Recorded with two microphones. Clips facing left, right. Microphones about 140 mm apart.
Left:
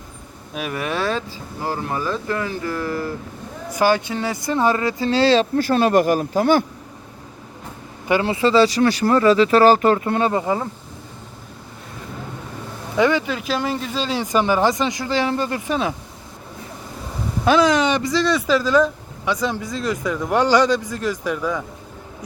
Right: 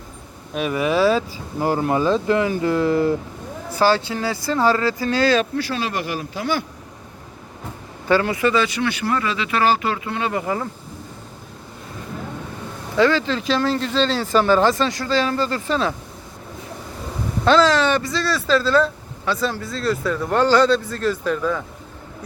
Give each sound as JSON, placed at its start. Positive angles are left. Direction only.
{"t": 0.5, "sound": "speech", "side_deg": 0}
{"t": 1.6, "sound": "speech", "side_deg": -25}
{"t": 3.7, "sound": "speech", "side_deg": 15}
{"t": 5.5, "sound": "speech", "side_deg": 50}
{"t": 8.2, "sound": "speech", "side_deg": 25}
{"t": 10.3, "sound": "speech", "side_deg": 20}
{"t": 13.0, "sound": "speech", "side_deg": 15}
{"t": 17.4, "sound": "speech", "side_deg": 15}